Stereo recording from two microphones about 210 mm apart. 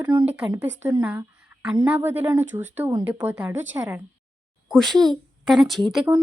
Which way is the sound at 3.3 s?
5° right (ahead or behind).